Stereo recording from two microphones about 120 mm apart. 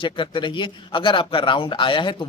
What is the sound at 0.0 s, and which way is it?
A man's voice, 40° left (ahead or behind).